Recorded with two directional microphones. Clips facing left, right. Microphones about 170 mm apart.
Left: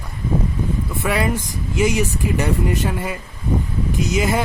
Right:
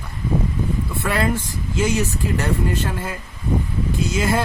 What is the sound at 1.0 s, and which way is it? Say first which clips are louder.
Speech: left 1 dB; 15° left (ahead or behind).